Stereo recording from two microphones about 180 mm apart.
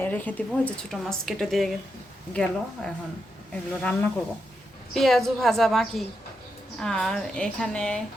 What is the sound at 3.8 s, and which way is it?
A woman's voice, 5° left (ahead or behind).